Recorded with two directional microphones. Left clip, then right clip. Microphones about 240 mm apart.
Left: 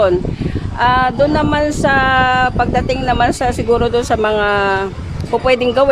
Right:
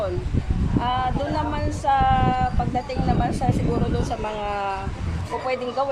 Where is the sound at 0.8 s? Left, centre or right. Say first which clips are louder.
Left 12 dB; left.